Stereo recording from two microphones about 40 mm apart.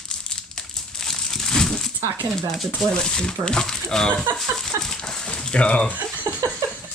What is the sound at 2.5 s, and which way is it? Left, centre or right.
Speech, centre.